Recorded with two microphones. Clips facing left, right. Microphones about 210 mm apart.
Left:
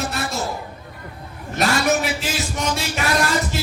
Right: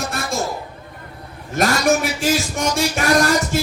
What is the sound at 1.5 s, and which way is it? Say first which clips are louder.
A man's voice: right 2 dB; 45° right (ahead or behind).